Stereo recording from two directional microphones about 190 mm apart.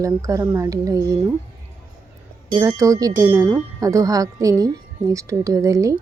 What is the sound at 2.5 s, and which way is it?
Speech, 15° right (ahead or behind).